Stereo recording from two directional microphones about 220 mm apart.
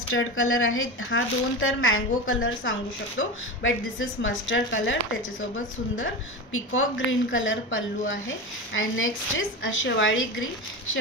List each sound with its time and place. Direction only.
0.1 s speech: 65° left (ahead or behind)
5.9 s speech: 65° left (ahead or behind)